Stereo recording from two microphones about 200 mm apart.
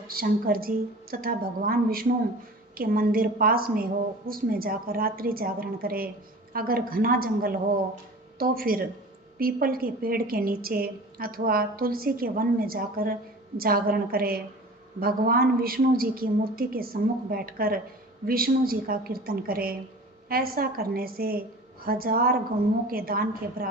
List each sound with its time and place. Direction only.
0.1 s a woman's voice: 45° right (ahead or behind)